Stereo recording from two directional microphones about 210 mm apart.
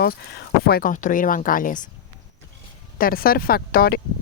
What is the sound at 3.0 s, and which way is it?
Speech, 45° left (ahead or behind).